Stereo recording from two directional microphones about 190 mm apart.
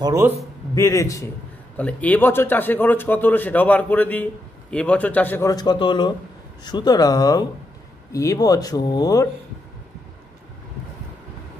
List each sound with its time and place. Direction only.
0.0 s a man's voice: 15° right (ahead or behind)
0.7 s a man's voice: 15° left (ahead or behind)